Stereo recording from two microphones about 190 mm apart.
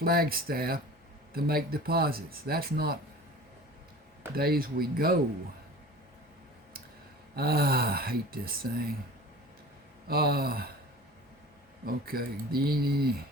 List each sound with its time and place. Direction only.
0.0 s speech: 50° right (ahead or behind)
4.4 s speech: 55° right (ahead or behind)
7.3 s speech: 55° right (ahead or behind)
10.1 s speech: 55° right (ahead or behind)
11.9 s speech: 50° right (ahead or behind)